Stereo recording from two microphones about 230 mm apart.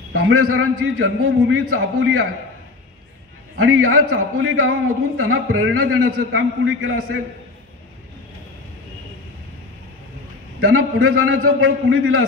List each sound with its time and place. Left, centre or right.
0.1 s a man's voice: right
3.5 s a man's voice: right
10.6 s a man's voice: right